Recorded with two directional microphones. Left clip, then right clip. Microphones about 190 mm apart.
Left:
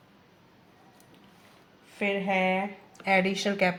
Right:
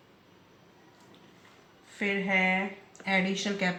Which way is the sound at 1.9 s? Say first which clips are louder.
Left 1 dB; 30° left (ahead or behind).